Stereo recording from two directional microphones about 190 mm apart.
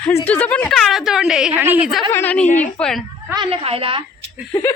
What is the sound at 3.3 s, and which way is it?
Speech, 25° right (ahead or behind).